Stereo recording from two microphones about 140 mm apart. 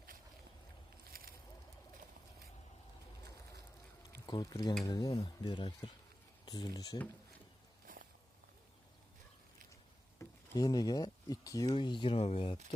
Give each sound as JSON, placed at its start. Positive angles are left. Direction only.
{"t": 1.1, "sound": "a sound", "side_deg": -90}
{"t": 4.3, "sound": "speech", "side_deg": 30}
{"t": 7.9, "sound": "walk", "side_deg": -75}
{"t": 10.2, "sound": "speech", "side_deg": 25}
{"t": 12.1, "sound": "speech", "side_deg": 50}